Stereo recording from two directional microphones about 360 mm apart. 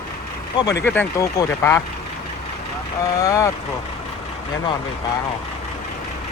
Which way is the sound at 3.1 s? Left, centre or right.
Centre.